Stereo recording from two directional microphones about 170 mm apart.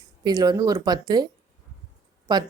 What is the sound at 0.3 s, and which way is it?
Speech, 25° right (ahead or behind).